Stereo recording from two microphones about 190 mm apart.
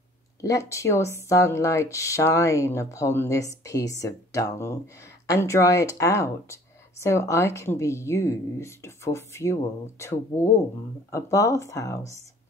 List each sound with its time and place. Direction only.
0.4 s speech: 15° left (ahead or behind)